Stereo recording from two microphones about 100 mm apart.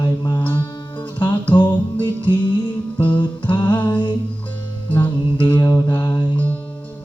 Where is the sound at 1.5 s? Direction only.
50° left (ahead or behind).